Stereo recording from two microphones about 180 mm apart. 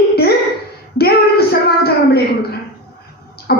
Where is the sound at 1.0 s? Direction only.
60° left (ahead or behind).